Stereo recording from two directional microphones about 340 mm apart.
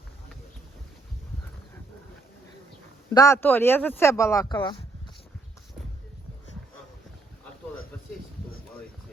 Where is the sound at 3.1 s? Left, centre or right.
Centre.